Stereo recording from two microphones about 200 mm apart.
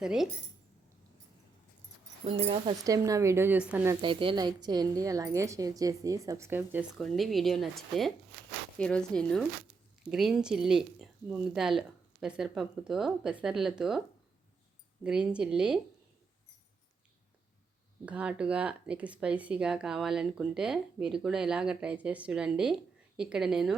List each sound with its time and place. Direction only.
0.0 s speech: 5° right (ahead or behind)
2.4 s speech: 30° right (ahead or behind)
2.8 s speech: 15° right (ahead or behind)
4.0 s speech: 25° right (ahead or behind); by 7.0 s 10° right (ahead or behind)
7.0 s speech: centre (ahead or behind)
15.0 s speech: 5° right (ahead or behind)
18.0 s speech: 5° right (ahead or behind)